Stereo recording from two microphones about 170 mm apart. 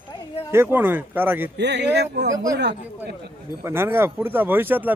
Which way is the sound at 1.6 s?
90° right.